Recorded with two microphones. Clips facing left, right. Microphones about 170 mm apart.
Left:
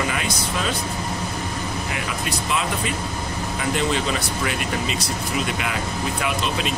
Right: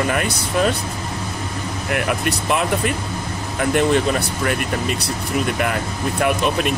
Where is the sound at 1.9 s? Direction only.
60° right (ahead or behind).